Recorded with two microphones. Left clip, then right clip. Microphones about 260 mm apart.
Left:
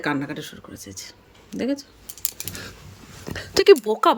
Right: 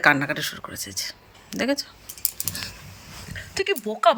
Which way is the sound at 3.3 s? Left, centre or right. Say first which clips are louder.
Left 11 dB; centre.